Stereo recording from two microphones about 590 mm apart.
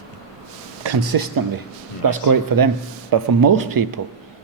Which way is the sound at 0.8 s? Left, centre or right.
Right.